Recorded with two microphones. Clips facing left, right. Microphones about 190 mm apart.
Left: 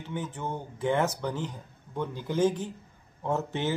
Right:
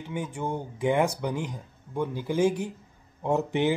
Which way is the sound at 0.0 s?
10° right (ahead or behind).